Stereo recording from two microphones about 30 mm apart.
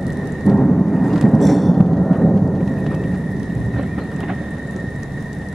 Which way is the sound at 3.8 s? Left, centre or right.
Centre.